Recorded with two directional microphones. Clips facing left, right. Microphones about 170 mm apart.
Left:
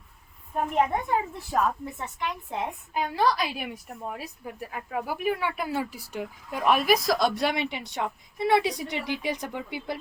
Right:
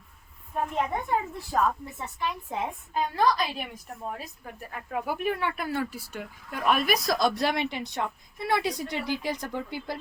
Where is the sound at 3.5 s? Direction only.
10° left (ahead or behind).